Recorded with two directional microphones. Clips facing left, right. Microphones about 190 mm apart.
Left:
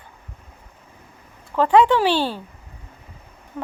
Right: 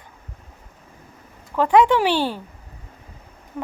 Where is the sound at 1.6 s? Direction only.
10° right (ahead or behind).